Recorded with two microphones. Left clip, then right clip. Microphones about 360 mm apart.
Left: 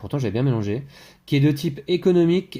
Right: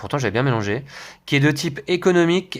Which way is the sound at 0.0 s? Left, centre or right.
Right.